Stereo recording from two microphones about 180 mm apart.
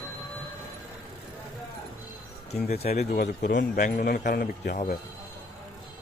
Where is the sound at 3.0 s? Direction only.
65° left (ahead or behind).